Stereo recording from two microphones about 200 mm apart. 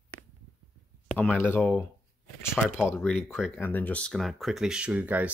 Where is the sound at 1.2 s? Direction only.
10° left (ahead or behind).